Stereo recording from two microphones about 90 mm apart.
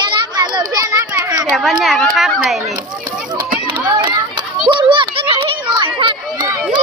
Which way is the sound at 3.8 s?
35° right (ahead or behind).